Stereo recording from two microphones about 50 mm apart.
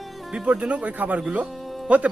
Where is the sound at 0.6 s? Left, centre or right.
Right.